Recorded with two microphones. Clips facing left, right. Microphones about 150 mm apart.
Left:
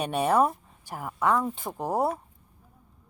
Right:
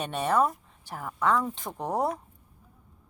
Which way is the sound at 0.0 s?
10° left (ahead or behind).